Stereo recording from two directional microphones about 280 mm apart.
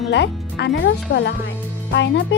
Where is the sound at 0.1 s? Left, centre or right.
Left.